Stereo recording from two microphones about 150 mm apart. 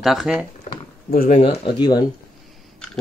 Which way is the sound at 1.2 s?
50° left (ahead or behind).